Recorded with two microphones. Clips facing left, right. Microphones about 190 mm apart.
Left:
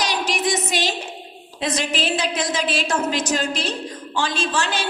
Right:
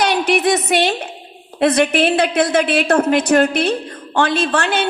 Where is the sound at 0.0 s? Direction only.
60° right (ahead or behind).